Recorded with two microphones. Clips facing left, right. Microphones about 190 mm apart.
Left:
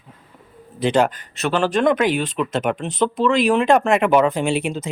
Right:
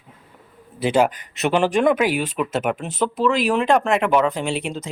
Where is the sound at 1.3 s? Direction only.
20° right (ahead or behind); by 4.0 s centre (ahead or behind).